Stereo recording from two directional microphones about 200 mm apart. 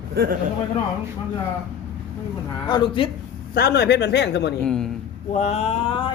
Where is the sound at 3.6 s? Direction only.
55° left (ahead or behind).